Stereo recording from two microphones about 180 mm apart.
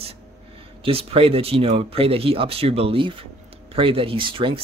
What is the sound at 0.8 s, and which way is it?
Speech, 30° right (ahead or behind).